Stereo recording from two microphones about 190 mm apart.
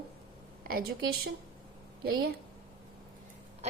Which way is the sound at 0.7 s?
55° right (ahead or behind).